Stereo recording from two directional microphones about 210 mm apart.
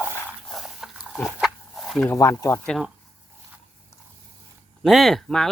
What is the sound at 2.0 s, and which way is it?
Speech, 15° left (ahead or behind).